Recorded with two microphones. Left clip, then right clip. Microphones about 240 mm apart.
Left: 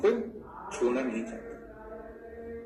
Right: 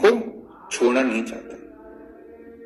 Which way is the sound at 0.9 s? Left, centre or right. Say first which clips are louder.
Right 11 dB; right.